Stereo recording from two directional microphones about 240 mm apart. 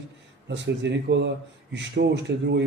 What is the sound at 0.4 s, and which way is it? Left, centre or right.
A man's voice, right.